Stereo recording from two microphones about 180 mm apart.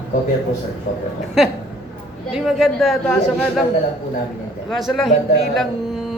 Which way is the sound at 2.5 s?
Centre (ahead or behind).